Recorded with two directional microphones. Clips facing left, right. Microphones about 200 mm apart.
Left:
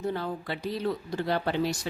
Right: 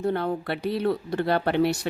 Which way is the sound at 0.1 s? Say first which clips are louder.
Right 6 dB; 60° right (ahead or behind).